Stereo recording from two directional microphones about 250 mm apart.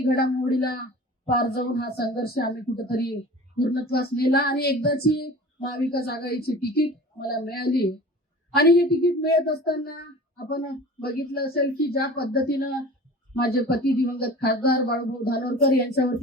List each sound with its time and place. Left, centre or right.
0.2 s child singing: left